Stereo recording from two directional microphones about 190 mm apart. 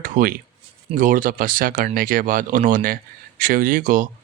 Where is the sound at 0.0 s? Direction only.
45° right (ahead or behind).